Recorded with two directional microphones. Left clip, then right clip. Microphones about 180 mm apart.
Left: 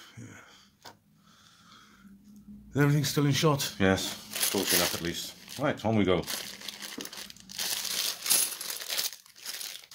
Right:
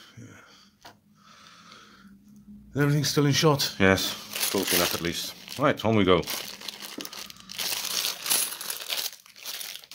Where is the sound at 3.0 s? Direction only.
20° right (ahead or behind); by 4.3 s 35° right (ahead or behind).